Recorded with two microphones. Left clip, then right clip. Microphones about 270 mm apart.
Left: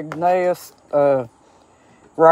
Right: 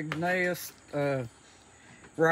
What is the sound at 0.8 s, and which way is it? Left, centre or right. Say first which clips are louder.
Speech: left 15 dB; left.